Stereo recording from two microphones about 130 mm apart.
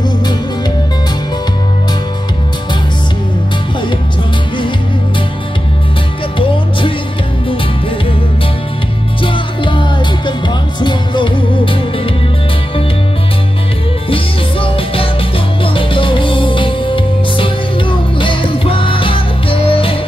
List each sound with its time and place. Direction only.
6.3 s music: 40° left (ahead or behind)
9.2 s music: 40° left (ahead or behind)
14.1 s music: 45° left (ahead or behind)